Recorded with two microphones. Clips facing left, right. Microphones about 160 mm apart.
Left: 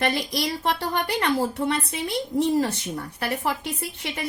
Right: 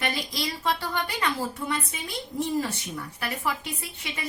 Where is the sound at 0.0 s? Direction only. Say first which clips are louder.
Left 5 dB; 65° left (ahead or behind).